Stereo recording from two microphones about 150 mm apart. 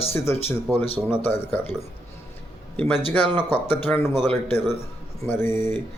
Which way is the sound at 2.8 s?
10° left (ahead or behind).